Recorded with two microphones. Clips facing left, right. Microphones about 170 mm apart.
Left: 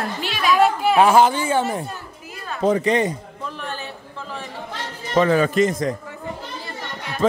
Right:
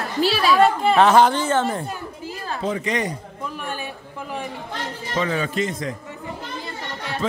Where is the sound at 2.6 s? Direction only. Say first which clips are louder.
Left 7 dB; 35° left (ahead or behind).